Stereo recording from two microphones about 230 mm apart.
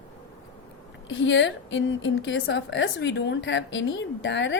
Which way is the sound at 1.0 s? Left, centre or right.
Left.